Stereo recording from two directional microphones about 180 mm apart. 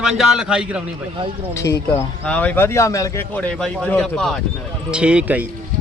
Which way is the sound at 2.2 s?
10° left (ahead or behind).